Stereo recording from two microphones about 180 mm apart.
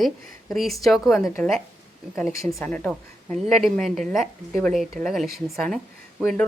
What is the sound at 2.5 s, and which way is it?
A woman's voice, 5° left (ahead or behind).